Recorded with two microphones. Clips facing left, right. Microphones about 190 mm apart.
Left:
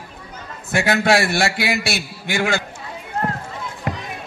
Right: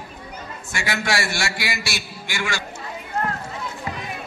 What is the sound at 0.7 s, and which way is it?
A man's voice, 60° left (ahead or behind).